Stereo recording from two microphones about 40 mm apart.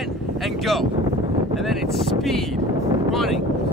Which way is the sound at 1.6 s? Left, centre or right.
Centre.